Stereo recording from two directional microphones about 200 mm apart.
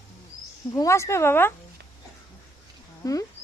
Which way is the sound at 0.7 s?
15° left (ahead or behind).